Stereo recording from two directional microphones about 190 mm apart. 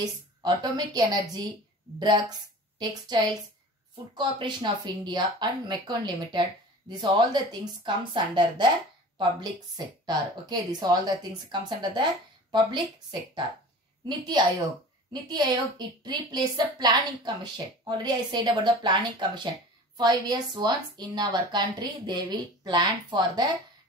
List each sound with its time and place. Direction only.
0.0 s speech: 20° right (ahead or behind)
14.0 s speech: 20° right (ahead or behind)